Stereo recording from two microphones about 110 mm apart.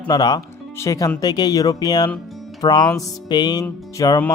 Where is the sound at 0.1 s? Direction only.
35° left (ahead or behind).